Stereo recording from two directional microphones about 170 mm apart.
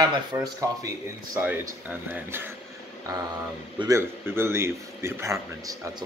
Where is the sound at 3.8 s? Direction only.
15° right (ahead or behind).